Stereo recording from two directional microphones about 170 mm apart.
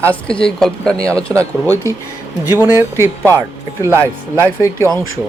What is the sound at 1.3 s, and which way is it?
Speech, 10° right (ahead or behind).